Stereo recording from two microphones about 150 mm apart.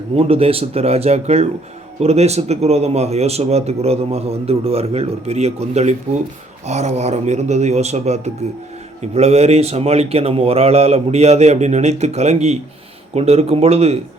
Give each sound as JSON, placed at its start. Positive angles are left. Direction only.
{"t": 0.2, "sound": "speech", "side_deg": -40}